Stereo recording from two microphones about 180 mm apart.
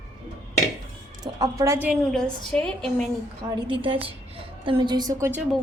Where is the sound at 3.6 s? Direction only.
30° right (ahead or behind); by 5.4 s 10° right (ahead or behind).